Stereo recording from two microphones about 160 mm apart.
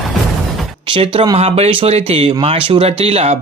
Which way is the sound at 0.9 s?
30° right (ahead or behind).